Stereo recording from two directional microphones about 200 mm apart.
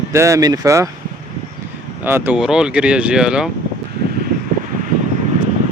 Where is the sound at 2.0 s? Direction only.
10° right (ahead or behind).